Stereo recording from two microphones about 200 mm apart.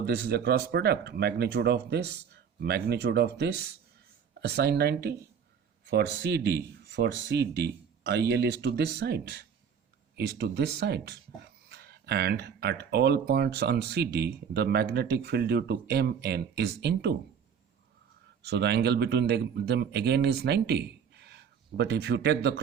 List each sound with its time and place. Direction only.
0.0 s speech: 55° right (ahead or behind)
18.4 s speech: 55° right (ahead or behind)